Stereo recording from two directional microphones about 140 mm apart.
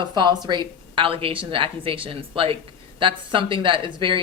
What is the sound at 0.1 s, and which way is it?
A woman's voice, 35° right (ahead or behind).